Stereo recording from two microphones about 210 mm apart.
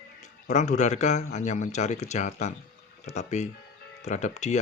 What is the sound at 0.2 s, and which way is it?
Speech, 35° left (ahead or behind).